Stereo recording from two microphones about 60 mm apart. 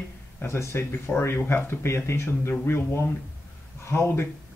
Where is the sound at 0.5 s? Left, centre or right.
Left.